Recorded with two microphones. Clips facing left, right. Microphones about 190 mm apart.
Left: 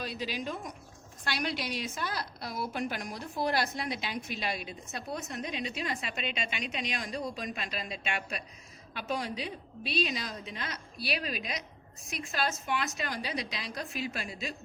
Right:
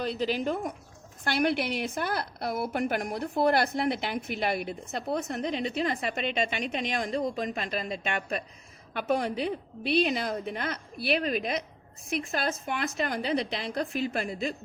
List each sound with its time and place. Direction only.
1.2 s a woman's voice: 55° right (ahead or behind)